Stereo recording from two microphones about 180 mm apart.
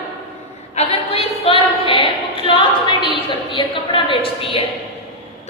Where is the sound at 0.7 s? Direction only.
35° left (ahead or behind).